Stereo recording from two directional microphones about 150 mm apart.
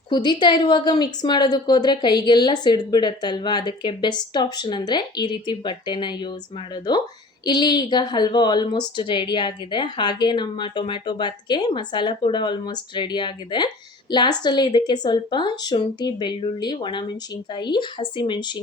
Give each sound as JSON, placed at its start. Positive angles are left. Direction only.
{"t": 0.1, "sound": "a woman's voice", "side_deg": 30}
{"t": 7.4, "sound": "a woman's voice", "side_deg": 30}